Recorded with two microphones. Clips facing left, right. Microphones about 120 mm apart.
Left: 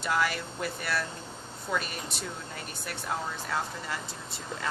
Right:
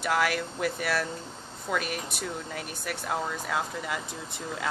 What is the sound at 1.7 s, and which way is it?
Speech, 5° right (ahead or behind).